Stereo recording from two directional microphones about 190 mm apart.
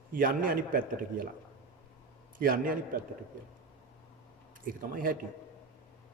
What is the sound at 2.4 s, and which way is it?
Speech, 50° right (ahead or behind).